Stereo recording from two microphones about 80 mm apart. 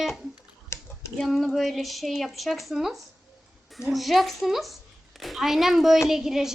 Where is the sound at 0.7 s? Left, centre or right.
Left.